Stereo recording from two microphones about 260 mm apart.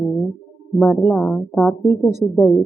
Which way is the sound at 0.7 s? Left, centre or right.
Centre.